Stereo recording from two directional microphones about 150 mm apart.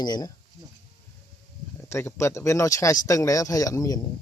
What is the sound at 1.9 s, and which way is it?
A man's voice, 15° left (ahead or behind).